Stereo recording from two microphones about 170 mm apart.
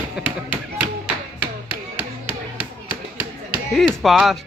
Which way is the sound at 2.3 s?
30° left (ahead or behind).